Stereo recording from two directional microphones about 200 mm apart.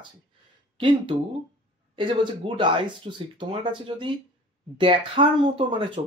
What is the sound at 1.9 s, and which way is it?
Speech, 25° right (ahead or behind).